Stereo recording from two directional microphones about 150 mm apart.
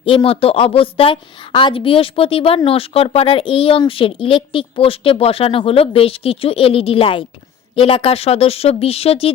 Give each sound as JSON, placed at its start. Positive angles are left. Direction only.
{"t": 0.0, "sound": "speech", "side_deg": 35}